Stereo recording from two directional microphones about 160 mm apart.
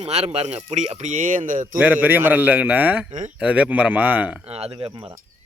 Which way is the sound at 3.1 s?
50° right (ahead or behind).